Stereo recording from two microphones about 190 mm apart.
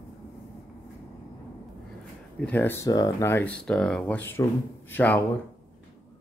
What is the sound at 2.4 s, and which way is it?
Speech, 10° left (ahead or behind).